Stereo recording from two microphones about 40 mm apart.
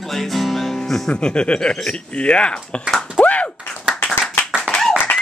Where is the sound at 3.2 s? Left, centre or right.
Left.